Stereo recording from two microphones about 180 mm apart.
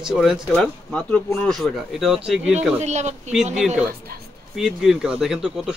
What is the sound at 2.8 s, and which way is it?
Speech, 40° right (ahead or behind).